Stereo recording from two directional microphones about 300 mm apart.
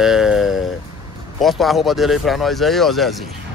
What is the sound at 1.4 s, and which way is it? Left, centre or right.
Speech, centre.